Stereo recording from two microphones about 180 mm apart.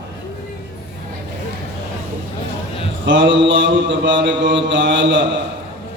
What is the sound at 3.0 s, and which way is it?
Mantra, 90° right.